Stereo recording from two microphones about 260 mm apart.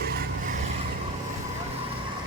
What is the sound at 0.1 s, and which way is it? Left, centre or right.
Vehicle, right.